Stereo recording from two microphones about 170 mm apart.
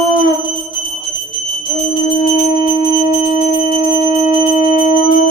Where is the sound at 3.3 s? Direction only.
50° left (ahead or behind).